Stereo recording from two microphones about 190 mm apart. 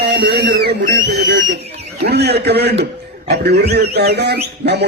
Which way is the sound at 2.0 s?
60° right (ahead or behind).